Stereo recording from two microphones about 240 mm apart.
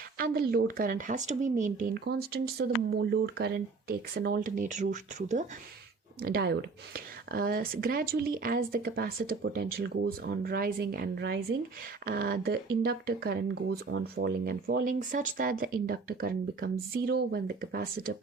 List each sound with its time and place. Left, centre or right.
0.2 s speech: right